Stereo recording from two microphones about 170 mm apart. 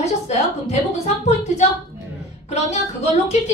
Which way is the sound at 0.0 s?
40° left (ahead or behind).